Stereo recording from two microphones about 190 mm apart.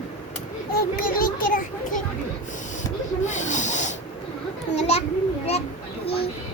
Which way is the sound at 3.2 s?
40° left (ahead or behind).